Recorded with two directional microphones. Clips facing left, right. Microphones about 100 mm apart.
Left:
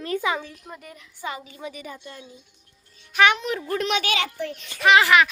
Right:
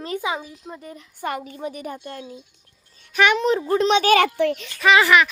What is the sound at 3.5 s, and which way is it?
Speech, 25° right (ahead or behind).